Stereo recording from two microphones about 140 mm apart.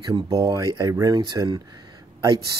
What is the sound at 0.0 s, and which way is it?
Speech, 30° right (ahead or behind).